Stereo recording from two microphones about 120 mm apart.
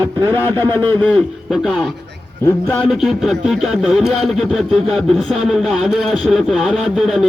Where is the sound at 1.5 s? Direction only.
5° right (ahead or behind).